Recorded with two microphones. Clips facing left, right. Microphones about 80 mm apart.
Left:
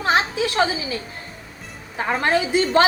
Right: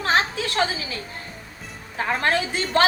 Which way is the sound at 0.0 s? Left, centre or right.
Centre.